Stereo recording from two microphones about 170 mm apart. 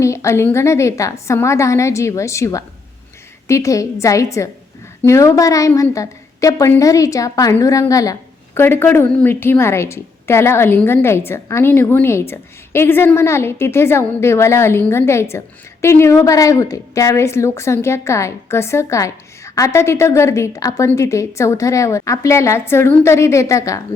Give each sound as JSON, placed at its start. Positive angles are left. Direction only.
{"t": 0.0, "sound": "a woman's voice", "side_deg": 15}